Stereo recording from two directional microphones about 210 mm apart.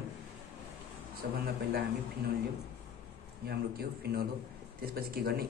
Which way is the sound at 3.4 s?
50° right (ahead or behind).